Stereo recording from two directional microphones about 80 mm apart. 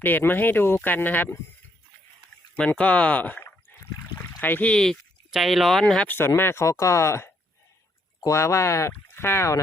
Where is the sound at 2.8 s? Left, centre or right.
Centre.